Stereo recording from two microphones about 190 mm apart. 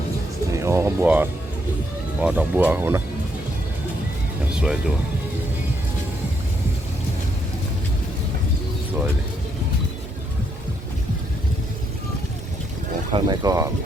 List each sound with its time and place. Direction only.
0.5 s music: 15° right (ahead or behind)
2.2 s speech: 10° right (ahead or behind)
4.5 s speech: 5° right (ahead or behind)
13.1 s speech: 20° right (ahead or behind)